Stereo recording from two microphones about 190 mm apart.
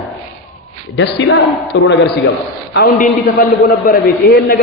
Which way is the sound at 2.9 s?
45° left (ahead or behind).